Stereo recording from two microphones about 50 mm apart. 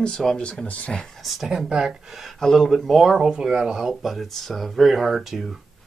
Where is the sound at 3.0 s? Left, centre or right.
Centre.